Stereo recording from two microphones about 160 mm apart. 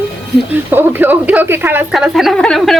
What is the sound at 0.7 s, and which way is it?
Speech, 10° right (ahead or behind).